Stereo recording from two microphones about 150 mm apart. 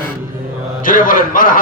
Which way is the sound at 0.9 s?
65° left (ahead or behind).